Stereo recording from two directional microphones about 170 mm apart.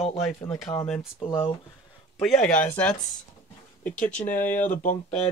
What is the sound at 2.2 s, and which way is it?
Speech, 5° left (ahead or behind).